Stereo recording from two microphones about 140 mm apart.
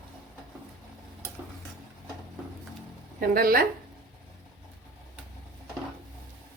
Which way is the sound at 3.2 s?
90° right.